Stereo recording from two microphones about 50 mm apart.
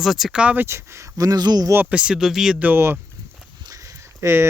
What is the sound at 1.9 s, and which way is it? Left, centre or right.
Speech, right.